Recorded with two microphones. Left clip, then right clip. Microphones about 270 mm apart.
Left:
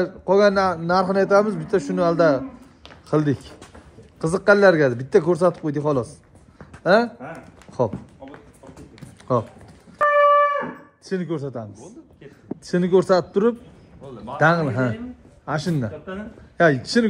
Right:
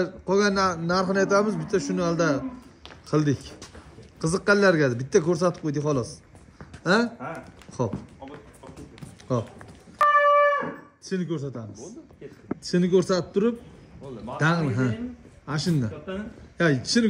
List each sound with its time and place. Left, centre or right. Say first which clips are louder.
0.0 s a man's voice: left 6 dB; centre
7.3 s a sound: left 7 dB; centre
9.3 s a man's voice: left 7 dB; centre
10.0 s shofar: left 1 dB; centre
11.1 s a man's voice: left 4 dB; centre
14.0 s a man's voice: left 2 dB; centre
14.3 s a man's voice: left 7 dB; centre